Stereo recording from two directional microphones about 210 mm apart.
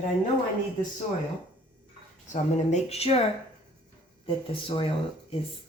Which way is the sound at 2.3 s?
30° left (ahead or behind).